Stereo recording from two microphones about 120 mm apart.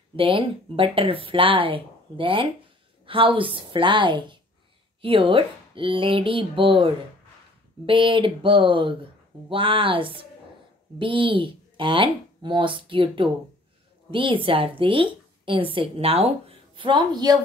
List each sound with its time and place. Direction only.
0.1 s a woman's voice: 50° right (ahead or behind)